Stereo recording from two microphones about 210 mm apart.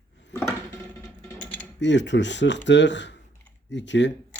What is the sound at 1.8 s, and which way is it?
Speech, 55° left (ahead or behind).